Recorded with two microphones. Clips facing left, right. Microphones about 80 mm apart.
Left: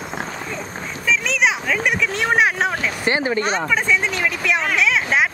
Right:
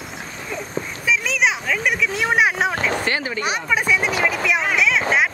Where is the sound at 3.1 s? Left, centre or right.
Left.